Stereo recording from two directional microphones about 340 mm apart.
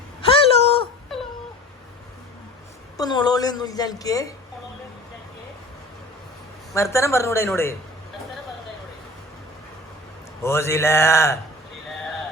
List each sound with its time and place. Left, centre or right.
0.2 s a sound: centre
1.1 s whimper: centre
3.0 s a woman's voice: centre
6.7 s a woman's voice: centre
10.4 s a woman's voice: centre